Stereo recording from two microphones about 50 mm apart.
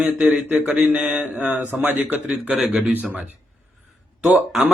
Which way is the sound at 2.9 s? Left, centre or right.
Right.